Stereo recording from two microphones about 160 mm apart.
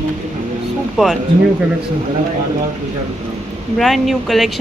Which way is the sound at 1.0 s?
Centre (ahead or behind).